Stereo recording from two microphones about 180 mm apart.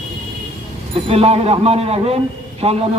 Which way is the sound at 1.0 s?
35° right (ahead or behind).